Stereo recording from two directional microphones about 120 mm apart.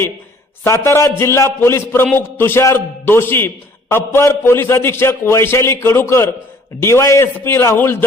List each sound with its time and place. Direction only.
0.6 s a man's voice: 20° left (ahead or behind)